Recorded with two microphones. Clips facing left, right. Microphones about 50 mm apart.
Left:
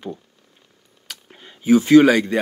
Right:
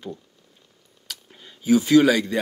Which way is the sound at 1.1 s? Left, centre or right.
Left.